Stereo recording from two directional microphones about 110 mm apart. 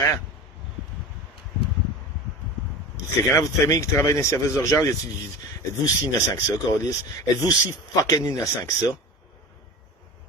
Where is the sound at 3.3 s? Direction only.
30° left (ahead or behind).